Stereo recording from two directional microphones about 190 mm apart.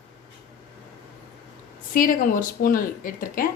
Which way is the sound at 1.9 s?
45° left (ahead or behind).